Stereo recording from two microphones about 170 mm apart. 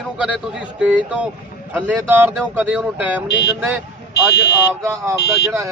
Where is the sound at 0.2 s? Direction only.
5° right (ahead or behind).